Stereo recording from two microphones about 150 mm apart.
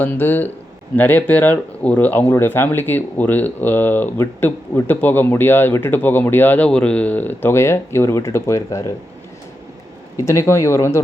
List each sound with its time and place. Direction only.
0.0 s speech: 10° left (ahead or behind)
10.2 s speech: 20° left (ahead or behind)